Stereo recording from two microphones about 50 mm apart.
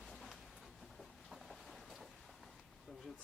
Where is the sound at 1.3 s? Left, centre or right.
Centre.